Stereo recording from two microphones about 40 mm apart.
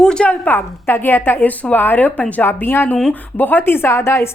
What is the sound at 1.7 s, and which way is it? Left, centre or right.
Speech, left.